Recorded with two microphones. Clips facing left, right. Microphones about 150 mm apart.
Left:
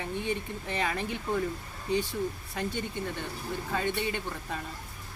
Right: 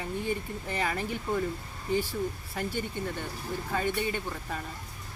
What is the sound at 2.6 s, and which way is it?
Speech, 10° right (ahead or behind).